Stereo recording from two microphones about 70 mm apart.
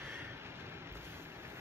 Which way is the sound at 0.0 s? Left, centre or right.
Right.